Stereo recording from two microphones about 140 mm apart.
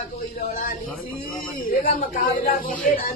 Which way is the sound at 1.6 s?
90° left.